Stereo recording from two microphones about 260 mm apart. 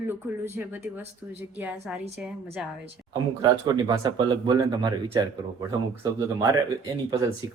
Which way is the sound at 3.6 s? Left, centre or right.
Centre.